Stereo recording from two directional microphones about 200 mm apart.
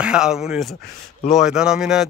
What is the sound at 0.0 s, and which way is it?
Speech, 5° right (ahead or behind).